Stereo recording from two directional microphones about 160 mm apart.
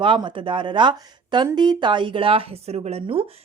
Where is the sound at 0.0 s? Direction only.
30° right (ahead or behind).